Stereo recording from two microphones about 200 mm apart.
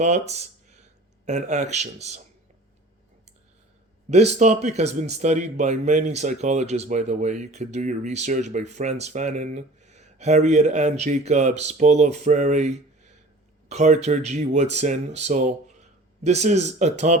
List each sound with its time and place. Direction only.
0.0 s speech: 35° right (ahead or behind)
4.1 s speech: 35° right (ahead or behind)